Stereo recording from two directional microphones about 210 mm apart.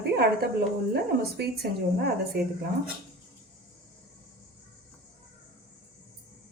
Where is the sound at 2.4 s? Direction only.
50° right (ahead or behind).